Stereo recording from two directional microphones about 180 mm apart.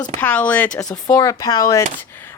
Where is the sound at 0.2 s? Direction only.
10° left (ahead or behind).